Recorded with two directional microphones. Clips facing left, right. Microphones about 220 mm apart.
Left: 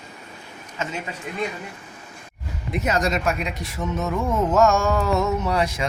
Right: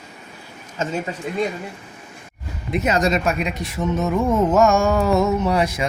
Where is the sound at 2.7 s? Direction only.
20° right (ahead or behind).